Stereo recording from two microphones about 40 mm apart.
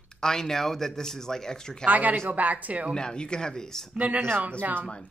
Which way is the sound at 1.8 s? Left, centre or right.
Right.